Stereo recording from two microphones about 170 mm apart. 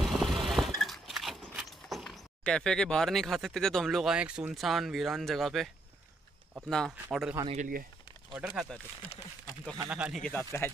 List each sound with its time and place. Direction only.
0.0 s vehicle: centre (ahead or behind)
1.5 s speech: centre (ahead or behind)
6.7 s speech: centre (ahead or behind)
7.4 s speech: 50° right (ahead or behind)
8.4 s speech: 5° right (ahead or behind)
9.8 s speech: 5° right (ahead or behind)
10.2 s speech: 10° left (ahead or behind)